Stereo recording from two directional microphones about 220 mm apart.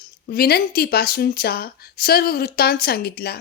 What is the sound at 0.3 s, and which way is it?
Speech, 45° left (ahead or behind).